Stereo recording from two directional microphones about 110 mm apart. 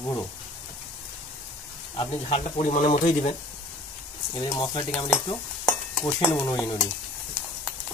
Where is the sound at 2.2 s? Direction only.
80° left.